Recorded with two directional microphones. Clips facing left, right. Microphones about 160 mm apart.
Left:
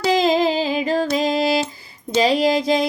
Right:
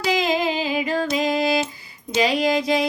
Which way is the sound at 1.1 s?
30° left (ahead or behind).